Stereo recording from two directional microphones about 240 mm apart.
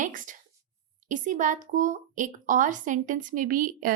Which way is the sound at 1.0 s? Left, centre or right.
Right.